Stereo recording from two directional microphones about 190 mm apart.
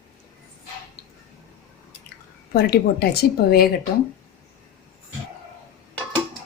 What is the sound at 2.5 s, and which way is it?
Speech, 55° left (ahead or behind).